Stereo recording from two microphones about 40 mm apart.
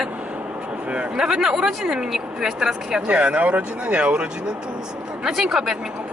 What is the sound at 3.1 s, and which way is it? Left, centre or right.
Speech, right.